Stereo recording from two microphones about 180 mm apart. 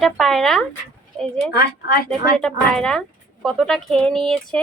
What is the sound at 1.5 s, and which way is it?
Speech, 55° left (ahead or behind).